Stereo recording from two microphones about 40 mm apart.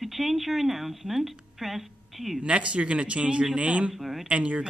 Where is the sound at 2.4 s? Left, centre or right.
Right.